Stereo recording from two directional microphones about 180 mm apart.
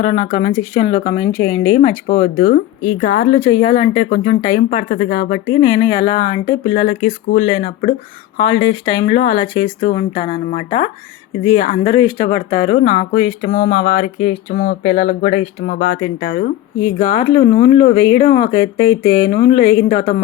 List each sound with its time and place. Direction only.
0.0 s speech: 40° left (ahead or behind)
1.4 s a woman's voice: 25° left (ahead or behind)
2.0 s speech: 40° left (ahead or behind)
3.0 s speech: 55° left (ahead or behind)
3.4 s speech: 35° left (ahead or behind)
4.9 s speech: 50° left (ahead or behind)
5.5 s a woman's voice: 30° left (ahead or behind)
6.8 s speech: 50° left (ahead or behind)
8.4 s speech: 30° left (ahead or behind)
11.9 s speech: 25° left (ahead or behind); by 16.5 s 45° left (ahead or behind)
17.0 s a woman's voice: 35° left (ahead or behind)
19.3 s speech: 35° left (ahead or behind)